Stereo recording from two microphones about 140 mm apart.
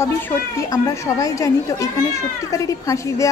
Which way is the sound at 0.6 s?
25° left (ahead or behind).